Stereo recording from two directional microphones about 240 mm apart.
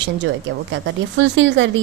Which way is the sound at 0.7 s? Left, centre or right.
Right.